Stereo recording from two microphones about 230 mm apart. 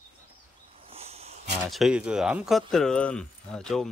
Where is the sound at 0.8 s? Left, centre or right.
Right.